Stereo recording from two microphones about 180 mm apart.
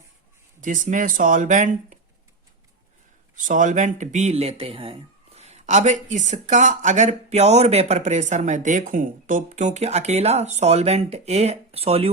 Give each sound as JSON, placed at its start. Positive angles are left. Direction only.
{"t": 0.6, "sound": "speech", "side_deg": -45}
{"t": 3.3, "sound": "speech", "side_deg": -45}